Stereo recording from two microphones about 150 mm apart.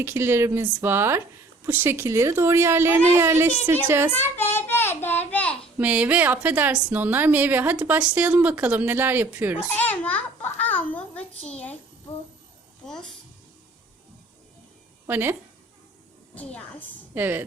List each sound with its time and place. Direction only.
0.0 s a woman's voice: 15° right (ahead or behind)
4.1 s child singing: 15° left (ahead or behind)
5.8 s a woman's voice: 10° right (ahead or behind)
9.6 s a child's voice: 10° left (ahead or behind)
10.6 s a sound: 10° left (ahead or behind)
11.4 s a child's voice: 10° left (ahead or behind)
12.8 s speech: centre (ahead or behind)
15.0 s speech: 15° right (ahead or behind)
16.3 s speech: 10° left (ahead or behind)
17.2 s a woman's voice: 15° right (ahead or behind)